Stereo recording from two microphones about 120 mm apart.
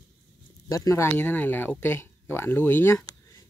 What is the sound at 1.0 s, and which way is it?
Speech, 15° left (ahead or behind).